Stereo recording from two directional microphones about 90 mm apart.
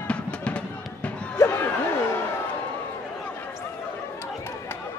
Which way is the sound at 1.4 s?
30° left (ahead or behind).